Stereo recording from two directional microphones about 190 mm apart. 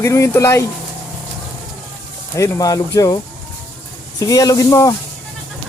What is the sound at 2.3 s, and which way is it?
Speech, 15° left (ahead or behind).